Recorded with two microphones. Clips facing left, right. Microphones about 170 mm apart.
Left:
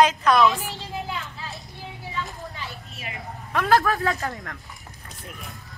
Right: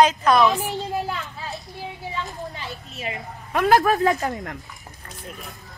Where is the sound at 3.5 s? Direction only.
15° right (ahead or behind).